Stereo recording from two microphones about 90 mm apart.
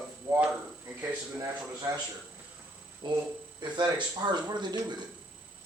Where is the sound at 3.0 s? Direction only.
50° right (ahead or behind).